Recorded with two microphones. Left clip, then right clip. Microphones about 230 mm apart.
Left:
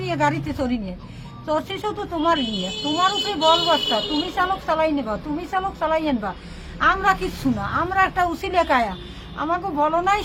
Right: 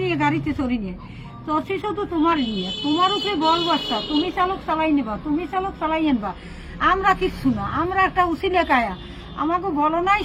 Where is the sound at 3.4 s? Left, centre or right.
Centre.